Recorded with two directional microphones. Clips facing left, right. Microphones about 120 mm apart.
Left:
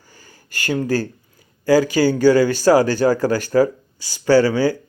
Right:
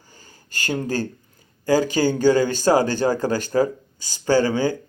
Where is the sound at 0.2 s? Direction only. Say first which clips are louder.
Left 1 dB; 20° right (ahead or behind).